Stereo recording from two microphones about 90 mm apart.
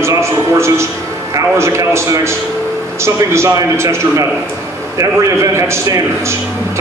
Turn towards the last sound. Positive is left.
turn(degrees=-30)  # may be behind; listen again after turning